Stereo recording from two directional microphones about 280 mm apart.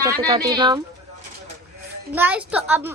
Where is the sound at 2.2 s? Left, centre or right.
Centre.